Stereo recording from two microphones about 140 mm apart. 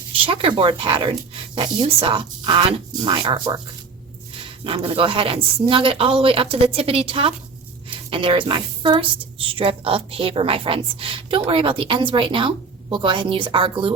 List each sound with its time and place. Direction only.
0.1 s a woman's voice: 40° right (ahead or behind)